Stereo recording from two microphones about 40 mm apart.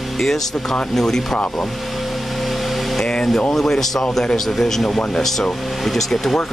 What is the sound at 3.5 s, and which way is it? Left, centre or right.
A man's voice, centre.